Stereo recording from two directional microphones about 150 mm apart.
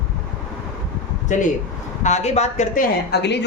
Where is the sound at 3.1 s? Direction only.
90° left.